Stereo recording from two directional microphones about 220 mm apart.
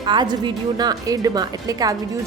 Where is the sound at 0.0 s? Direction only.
20° right (ahead or behind).